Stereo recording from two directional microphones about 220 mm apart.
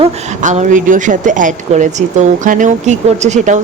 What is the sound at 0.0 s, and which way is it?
Speech, 30° right (ahead or behind).